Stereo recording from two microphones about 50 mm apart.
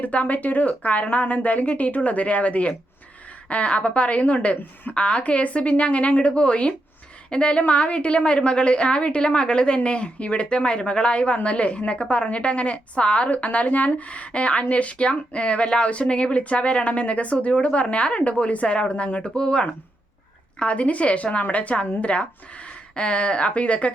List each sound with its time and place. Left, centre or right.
0.0 s a woman's voice: left
4.9 s speech: left